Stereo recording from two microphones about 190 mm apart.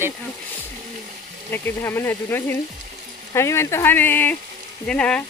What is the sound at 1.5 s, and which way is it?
Speech, 10° left (ahead or behind).